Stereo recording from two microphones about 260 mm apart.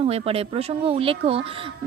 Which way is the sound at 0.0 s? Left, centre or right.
Right.